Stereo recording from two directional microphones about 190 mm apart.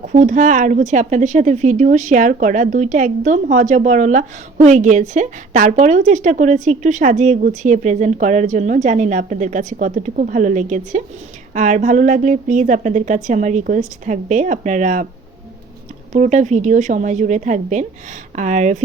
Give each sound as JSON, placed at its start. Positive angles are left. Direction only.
{"t": 0.0, "sound": "a woman's voice", "side_deg": -40}
{"t": 16.1, "sound": "a woman's voice", "side_deg": -40}